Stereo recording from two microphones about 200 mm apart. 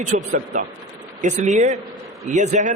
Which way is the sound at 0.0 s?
40° right (ahead or behind).